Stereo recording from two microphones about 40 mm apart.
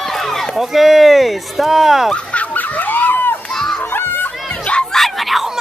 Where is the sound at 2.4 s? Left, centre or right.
Left.